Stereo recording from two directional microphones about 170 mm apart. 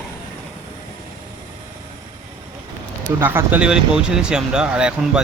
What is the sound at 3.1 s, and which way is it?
Speech, 15° right (ahead or behind).